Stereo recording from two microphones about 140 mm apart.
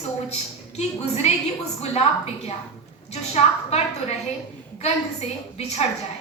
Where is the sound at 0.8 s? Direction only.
50° left (ahead or behind).